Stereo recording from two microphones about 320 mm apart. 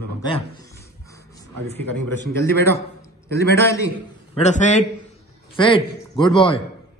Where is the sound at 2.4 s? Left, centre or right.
Centre.